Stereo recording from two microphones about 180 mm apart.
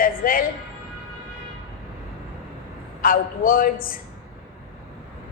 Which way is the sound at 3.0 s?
50° left (ahead or behind).